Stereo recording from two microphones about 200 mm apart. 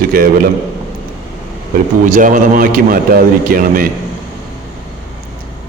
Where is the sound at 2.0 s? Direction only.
40° right (ahead or behind).